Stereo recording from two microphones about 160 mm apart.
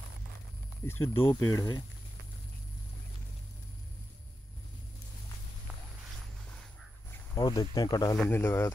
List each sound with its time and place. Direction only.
0.8 s speech: 15° left (ahead or behind)
7.3 s speech: 25° left (ahead or behind)
8.2 s speech: 15° left (ahead or behind)